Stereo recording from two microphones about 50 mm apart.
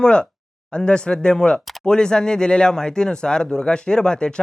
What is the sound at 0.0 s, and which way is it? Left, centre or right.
Speech, centre.